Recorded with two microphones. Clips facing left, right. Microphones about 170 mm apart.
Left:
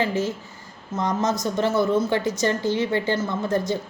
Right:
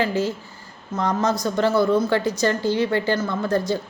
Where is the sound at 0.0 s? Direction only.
20° left (ahead or behind).